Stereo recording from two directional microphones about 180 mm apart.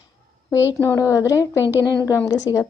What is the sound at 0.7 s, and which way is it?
A woman's voice, 15° left (ahead or behind).